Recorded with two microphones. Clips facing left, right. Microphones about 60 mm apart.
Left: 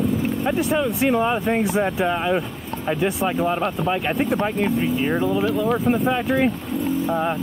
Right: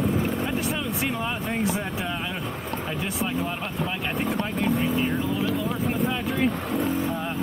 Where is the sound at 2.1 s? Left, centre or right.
Left.